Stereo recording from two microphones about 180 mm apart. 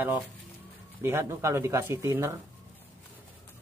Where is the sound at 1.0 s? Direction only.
15° right (ahead or behind).